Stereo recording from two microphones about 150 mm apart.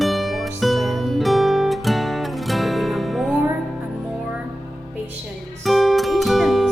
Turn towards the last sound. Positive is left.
turn(degrees=0)  # may be behind; listen again after turning